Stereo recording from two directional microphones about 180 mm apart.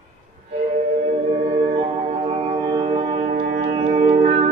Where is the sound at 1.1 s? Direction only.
30° right (ahead or behind).